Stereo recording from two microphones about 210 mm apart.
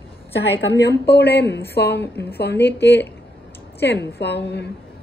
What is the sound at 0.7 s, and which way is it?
A woman's voice, 55° left (ahead or behind).